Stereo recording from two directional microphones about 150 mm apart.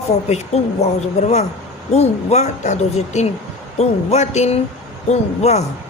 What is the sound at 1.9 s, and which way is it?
A woman's voice, 45° left (ahead or behind).